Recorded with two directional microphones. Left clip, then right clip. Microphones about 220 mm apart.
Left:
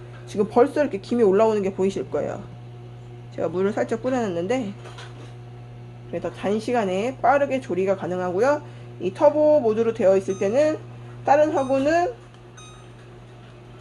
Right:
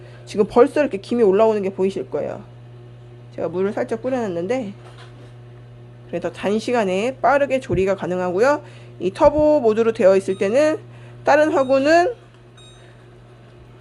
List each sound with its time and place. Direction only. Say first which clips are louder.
0.3 s speech: right 4 dB; 30° right (ahead or behind)
6.1 s speech: right 3 dB; 35° right (ahead or behind)